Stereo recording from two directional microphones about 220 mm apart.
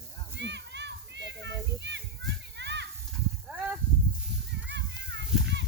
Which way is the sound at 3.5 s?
5° right (ahead or behind).